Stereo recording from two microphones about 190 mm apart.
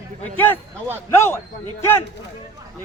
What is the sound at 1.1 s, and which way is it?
Speech, 15° left (ahead or behind).